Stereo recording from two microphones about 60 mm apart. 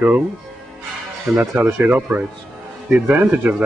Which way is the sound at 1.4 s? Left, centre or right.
Right.